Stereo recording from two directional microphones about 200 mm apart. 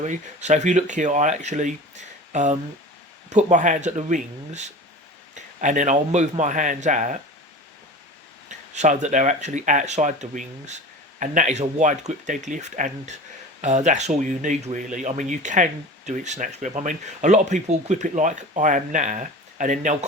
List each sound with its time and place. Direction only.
0.0 s speech: 35° right (ahead or behind)
8.7 s speech: 35° right (ahead or behind)